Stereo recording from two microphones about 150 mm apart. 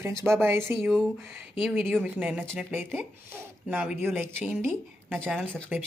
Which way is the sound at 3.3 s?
15° right (ahead or behind).